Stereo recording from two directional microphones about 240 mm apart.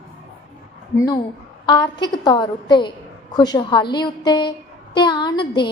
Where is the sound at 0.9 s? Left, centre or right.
Centre.